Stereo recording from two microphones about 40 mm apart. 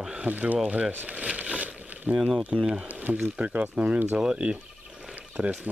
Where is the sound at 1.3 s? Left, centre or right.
Right.